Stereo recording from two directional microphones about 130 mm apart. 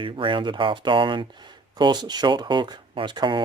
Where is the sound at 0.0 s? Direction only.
40° right (ahead or behind).